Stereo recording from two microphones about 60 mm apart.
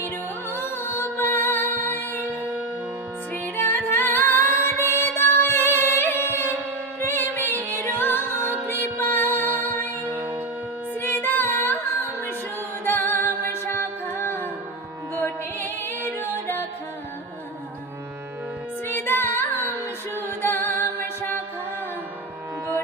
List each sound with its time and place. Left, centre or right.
0.5 s music: left
3.6 s music: left
10.1 s shofar: right
11.0 s singing: left
12.8 s music: left
18.9 s female singing: left
20.4 s music: left